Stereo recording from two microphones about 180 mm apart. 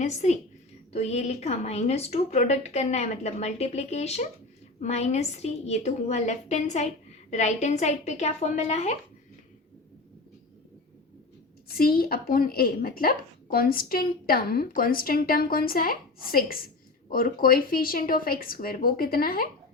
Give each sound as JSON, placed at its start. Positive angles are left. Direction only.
{"t": 0.0, "sound": "a woman's voice", "side_deg": 40}
{"t": 11.8, "sound": "a woman's voice", "side_deg": 55}